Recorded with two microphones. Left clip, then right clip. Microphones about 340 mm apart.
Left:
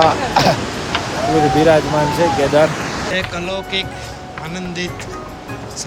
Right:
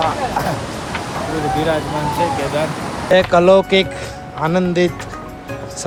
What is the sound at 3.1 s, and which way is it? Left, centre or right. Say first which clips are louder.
Speech: right 15 dB; centre.